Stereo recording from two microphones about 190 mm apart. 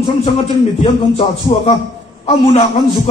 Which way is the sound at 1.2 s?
25° left (ahead or behind).